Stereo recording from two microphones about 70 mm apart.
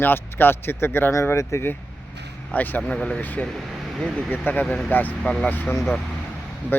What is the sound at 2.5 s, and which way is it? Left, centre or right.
Speech, left.